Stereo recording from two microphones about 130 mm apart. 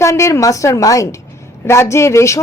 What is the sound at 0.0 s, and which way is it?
Speech, 25° left (ahead or behind).